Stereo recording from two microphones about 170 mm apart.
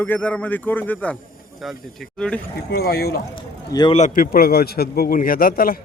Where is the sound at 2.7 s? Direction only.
65° left (ahead or behind).